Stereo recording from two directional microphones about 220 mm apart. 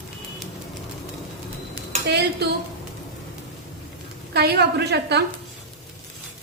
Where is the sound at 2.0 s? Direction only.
50° right (ahead or behind).